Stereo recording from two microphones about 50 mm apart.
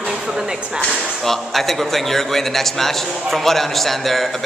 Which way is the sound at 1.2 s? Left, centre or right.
Centre.